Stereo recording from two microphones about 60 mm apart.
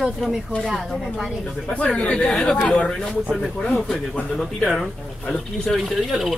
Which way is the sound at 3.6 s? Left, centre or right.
Centre.